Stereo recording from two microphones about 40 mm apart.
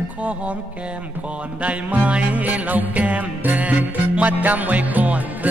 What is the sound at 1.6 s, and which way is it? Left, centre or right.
Music, right.